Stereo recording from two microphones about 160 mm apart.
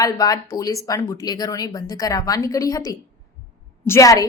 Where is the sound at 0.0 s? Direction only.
20° left (ahead or behind).